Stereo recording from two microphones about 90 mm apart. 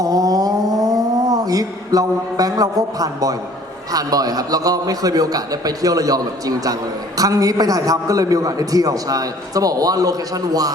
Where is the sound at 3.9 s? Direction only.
45° right (ahead or behind).